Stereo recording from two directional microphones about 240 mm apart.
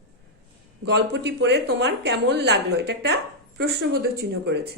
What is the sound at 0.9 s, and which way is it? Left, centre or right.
Speech, right.